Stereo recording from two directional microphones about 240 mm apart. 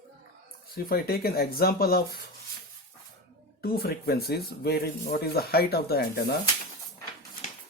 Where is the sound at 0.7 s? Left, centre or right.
Left.